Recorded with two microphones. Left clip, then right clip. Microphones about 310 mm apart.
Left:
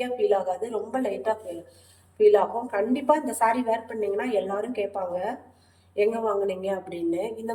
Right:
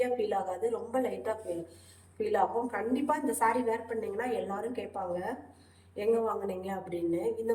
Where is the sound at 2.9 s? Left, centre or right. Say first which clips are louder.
Left 8 dB; left.